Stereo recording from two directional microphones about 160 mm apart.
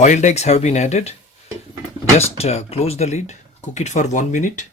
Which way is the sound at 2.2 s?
40° left (ahead or behind).